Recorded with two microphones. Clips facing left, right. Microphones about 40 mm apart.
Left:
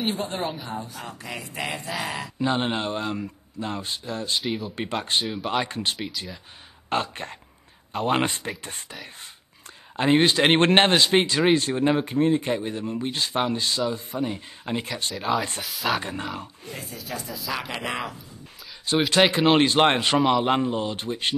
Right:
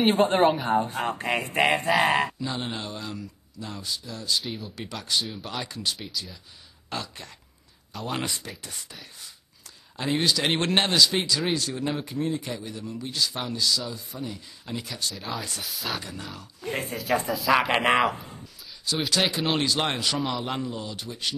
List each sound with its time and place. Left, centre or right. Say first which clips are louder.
0.1 s speech: right 9 dB; right
2.4 s speech: left 7 dB; left
4.4 s speech: left 5 dB; centre
4.7 s speech: left 1 dB; left
9.9 s speech: left 6 dB; left
15.1 s speech: left 8 dB; centre
16.0 s speech: left 6 dB; left
16.6 s speech: right 7 dB; right
17.3 s speech: right 9 dB; centre
17.6 s speech: right 8 dB; right
18.9 s speech: left 6 dB; left